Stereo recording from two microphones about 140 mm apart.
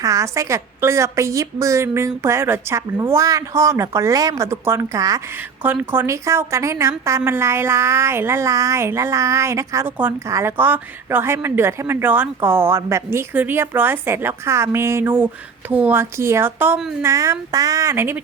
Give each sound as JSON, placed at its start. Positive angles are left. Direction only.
{"t": 0.0, "sound": "a woman's voice", "side_deg": -25}
{"t": 7.3, "sound": "a sound", "side_deg": -20}
{"t": 17.0, "sound": "a woman's voice", "side_deg": -20}